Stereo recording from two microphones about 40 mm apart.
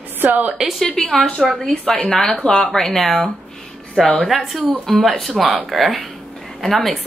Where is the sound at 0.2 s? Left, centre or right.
Right.